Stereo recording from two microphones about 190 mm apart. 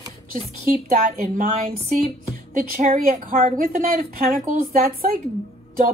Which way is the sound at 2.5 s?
40° right (ahead or behind).